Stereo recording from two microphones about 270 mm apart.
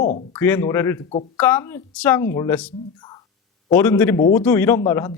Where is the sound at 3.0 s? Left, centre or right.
Centre.